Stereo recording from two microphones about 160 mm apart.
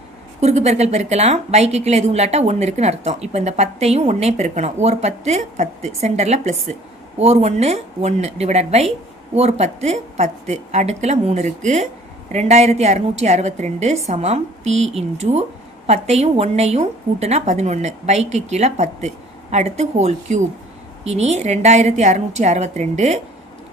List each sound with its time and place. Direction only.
0.3 s a woman's voice: 45° right (ahead or behind)